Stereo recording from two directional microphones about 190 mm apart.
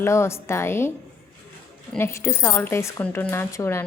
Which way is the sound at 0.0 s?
15° left (ahead or behind).